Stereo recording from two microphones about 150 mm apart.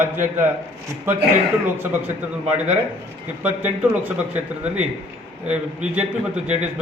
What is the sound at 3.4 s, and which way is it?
Speech, 10° right (ahead or behind).